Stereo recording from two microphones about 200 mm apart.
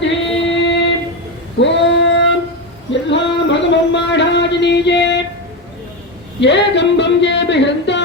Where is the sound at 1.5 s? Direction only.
65° left (ahead or behind).